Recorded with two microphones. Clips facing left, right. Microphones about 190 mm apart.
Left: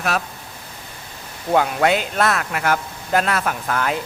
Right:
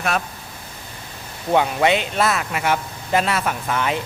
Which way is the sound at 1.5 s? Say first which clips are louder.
Even; centre (ahead or behind).